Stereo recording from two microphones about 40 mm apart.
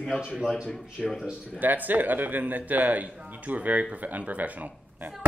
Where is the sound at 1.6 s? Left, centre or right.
Right.